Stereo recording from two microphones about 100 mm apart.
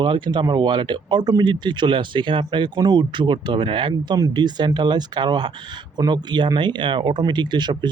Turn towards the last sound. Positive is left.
turn(degrees=-50)  # may be behind; listen again after turning